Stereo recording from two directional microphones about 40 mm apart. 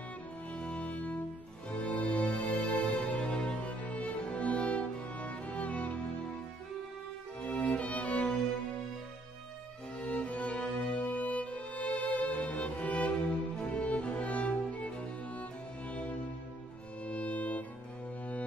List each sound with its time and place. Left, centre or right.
0.5 s music: left
7.4 s music: left
9.9 s music: left
17.0 s violin: left